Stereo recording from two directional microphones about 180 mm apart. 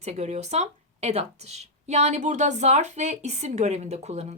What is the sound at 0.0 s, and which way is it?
Speech, 40° right (ahead or behind).